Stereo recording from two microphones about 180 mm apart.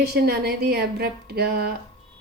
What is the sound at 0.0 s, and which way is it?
Speech, 60° right (ahead or behind).